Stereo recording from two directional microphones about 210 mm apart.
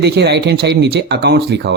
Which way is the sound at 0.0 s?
50° right (ahead or behind).